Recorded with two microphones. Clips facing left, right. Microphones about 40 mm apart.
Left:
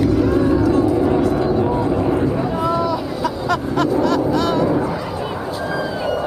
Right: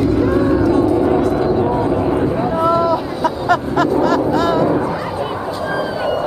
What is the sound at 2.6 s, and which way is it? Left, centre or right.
Boat, right.